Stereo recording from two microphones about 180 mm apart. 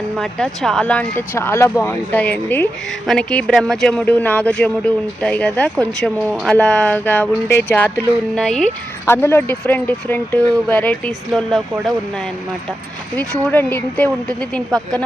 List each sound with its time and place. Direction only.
0.2 s speech: 5° left (ahead or behind)
13.4 s speech: 10° left (ahead or behind)